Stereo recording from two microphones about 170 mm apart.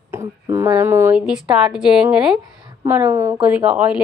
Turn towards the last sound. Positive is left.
turn(degrees=-10)  # may be behind; listen again after turning